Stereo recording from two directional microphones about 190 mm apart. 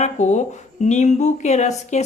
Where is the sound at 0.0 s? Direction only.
35° left (ahead or behind).